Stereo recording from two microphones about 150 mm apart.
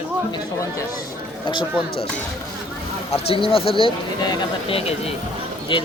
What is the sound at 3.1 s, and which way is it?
Speech, 40° left (ahead or behind).